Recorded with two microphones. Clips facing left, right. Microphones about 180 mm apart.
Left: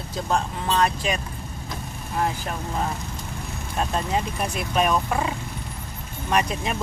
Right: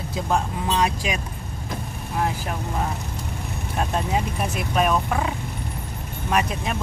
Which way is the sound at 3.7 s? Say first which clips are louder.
Right 1 dB; 5° right (ahead or behind).